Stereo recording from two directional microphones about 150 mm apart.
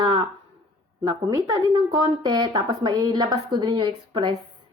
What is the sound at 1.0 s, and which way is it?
A woman's voice, 25° right (ahead or behind).